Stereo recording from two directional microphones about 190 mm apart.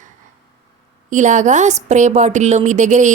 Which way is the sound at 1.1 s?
40° right (ahead or behind).